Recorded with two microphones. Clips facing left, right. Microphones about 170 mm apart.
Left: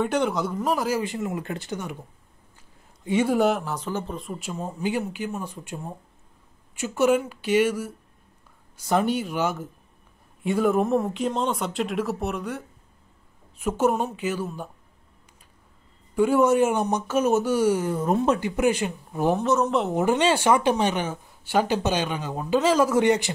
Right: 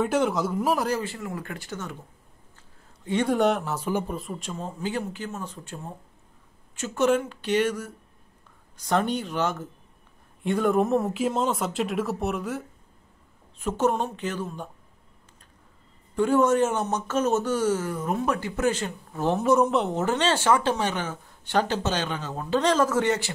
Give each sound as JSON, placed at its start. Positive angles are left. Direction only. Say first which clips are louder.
{"t": 0.0, "sound": "speech", "louder": "even", "side_deg": 0}
{"t": 1.0, "sound": "speech", "louder": "left 5 dB", "side_deg": 20}
{"t": 3.1, "sound": "speech", "louder": "left 1 dB", "side_deg": 5}
{"t": 16.2, "sound": "speech", "louder": "left 2 dB", "side_deg": 10}
{"t": 17.9, "sound": "speech", "louder": "left 4 dB", "side_deg": 30}
{"t": 19.3, "sound": "speech", "louder": "right 4 dB", "side_deg": -10}
{"t": 19.9, "sound": "speech", "louder": "left 3 dB", "side_deg": 15}